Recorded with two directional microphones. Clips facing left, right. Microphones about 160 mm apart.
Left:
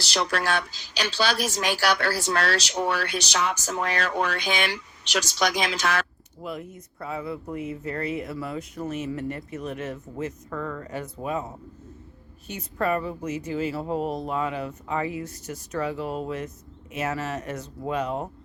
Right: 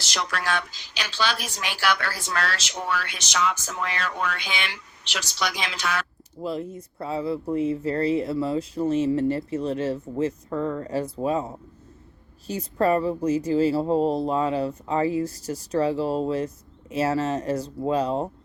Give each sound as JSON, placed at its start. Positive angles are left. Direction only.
{"t": 0.1, "sound": "a woman's voice", "side_deg": 30}
{"t": 6.4, "sound": "speech", "side_deg": -30}